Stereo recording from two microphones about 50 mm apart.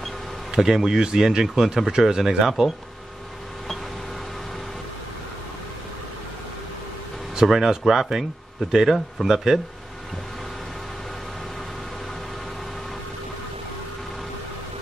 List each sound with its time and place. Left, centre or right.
0.6 s speech: centre
7.4 s speech: centre